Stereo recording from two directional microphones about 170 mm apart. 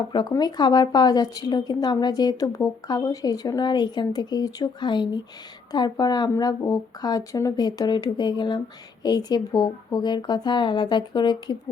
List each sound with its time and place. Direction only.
0.1 s a woman's voice: 25° left (ahead or behind)